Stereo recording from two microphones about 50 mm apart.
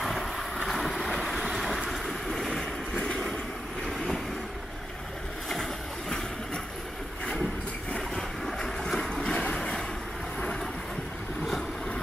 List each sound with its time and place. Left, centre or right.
0.0 s boat: centre
1.4 s vehicle: centre
3.8 s vehicle: centre
5.5 s boat: centre
8.5 s boat: centre
9.5 s a sound: centre